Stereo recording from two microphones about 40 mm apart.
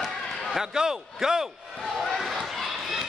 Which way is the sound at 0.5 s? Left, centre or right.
Centre.